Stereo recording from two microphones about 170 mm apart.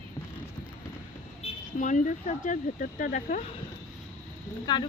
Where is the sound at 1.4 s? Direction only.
50° left (ahead or behind).